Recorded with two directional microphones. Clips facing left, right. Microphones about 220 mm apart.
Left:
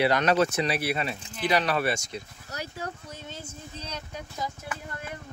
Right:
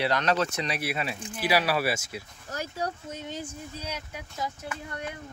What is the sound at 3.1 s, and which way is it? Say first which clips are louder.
Speech: right 5 dB; 15° right (ahead or behind).